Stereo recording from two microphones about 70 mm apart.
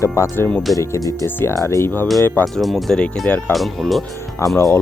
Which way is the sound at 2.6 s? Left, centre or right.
Centre.